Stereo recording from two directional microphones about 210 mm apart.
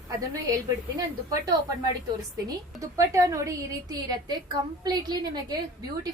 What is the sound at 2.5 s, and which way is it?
A woman's voice, 15° right (ahead or behind).